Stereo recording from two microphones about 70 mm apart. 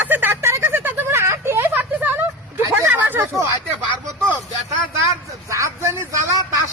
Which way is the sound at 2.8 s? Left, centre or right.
Right.